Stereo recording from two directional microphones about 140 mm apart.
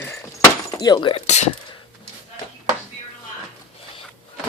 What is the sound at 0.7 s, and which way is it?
Chopping, 30° left (ahead or behind).